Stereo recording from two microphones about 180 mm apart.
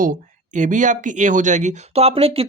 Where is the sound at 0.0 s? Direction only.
45° right (ahead or behind).